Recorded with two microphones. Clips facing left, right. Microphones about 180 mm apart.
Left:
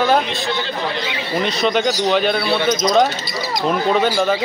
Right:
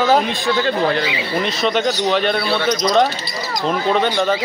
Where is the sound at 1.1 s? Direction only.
Centre (ahead or behind).